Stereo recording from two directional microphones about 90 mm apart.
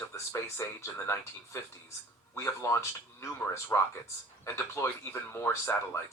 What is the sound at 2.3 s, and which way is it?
Speech, 30° left (ahead or behind).